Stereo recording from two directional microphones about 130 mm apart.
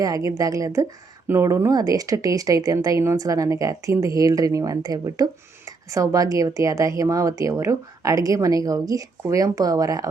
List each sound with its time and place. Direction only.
0.0 s speech: 25° right (ahead or behind)